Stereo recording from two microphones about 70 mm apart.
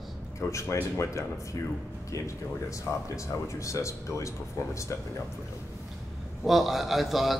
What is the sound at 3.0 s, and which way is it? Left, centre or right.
Speech, left.